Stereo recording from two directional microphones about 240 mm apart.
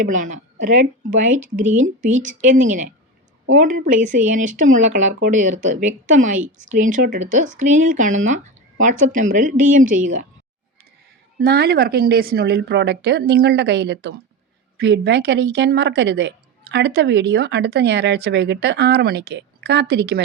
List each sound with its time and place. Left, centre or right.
0.0 s speech: right
11.3 s a woman's voice: right